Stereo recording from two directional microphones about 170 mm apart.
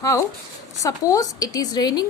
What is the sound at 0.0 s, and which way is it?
A woman's voice, 20° left (ahead or behind).